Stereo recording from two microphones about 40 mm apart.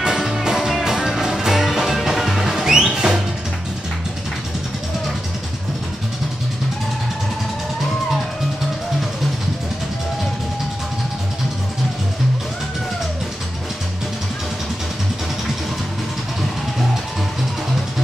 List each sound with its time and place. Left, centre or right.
0.0 s music: centre